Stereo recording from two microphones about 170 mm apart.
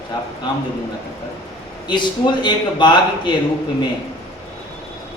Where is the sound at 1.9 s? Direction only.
25° left (ahead or behind).